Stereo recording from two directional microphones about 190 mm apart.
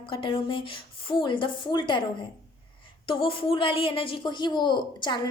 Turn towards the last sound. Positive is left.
turn(degrees=25)  # may be behind; listen again after turning